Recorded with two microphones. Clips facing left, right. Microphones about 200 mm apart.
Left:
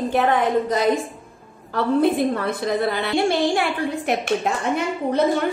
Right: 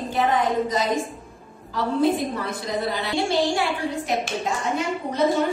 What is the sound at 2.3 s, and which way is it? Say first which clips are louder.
A woman's voice: left 5 dB; 60° left (ahead or behind).